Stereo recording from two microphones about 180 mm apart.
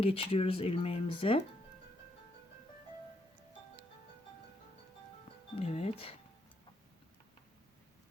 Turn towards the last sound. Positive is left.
turn(degrees=35)  # may be behind; listen again after turning